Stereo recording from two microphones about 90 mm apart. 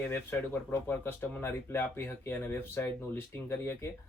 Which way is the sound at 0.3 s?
25° left (ahead or behind).